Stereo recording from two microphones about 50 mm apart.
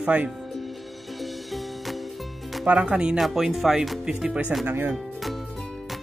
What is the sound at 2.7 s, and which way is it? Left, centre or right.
Speech, centre.